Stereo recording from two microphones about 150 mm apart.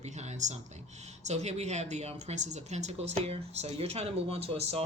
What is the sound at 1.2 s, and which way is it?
Speech, 50° right (ahead or behind).